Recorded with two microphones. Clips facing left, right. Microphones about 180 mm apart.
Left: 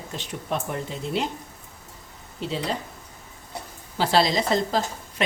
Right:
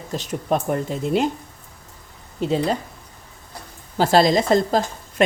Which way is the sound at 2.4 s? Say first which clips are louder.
Right 9 dB; 50° right (ahead or behind).